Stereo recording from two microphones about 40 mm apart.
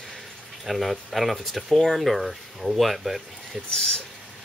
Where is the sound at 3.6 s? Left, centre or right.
Centre.